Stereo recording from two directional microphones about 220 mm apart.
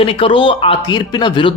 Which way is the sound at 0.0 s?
25° left (ahead or behind).